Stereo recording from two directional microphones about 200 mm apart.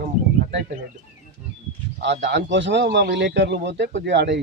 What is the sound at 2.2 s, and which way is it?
A man's voice, 60° right (ahead or behind).